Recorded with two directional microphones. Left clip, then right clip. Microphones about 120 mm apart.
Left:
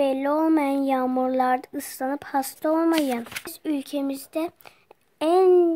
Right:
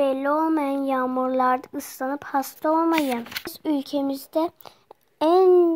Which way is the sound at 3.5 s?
10° right (ahead or behind).